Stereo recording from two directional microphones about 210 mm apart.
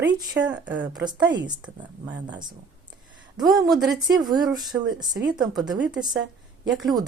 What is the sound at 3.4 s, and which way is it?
Speech, centre (ahead or behind).